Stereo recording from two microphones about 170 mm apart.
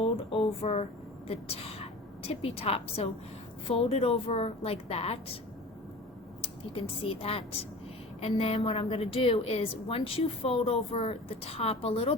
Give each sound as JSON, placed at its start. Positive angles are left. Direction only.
{"t": 0.0, "sound": "a woman's voice", "side_deg": 35}
{"t": 6.4, "sound": "a woman's voice", "side_deg": 30}